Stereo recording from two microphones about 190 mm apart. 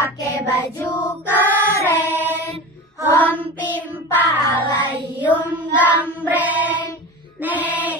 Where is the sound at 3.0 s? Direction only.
10° left (ahead or behind).